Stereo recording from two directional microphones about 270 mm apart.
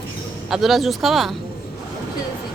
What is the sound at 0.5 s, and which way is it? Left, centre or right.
Speech, centre.